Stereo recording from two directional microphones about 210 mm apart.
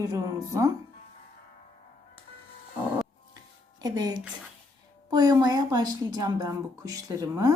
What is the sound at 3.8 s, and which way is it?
A woman's voice, 20° right (ahead or behind).